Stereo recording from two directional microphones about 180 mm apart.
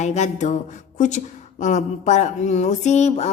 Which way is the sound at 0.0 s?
40° left (ahead or behind).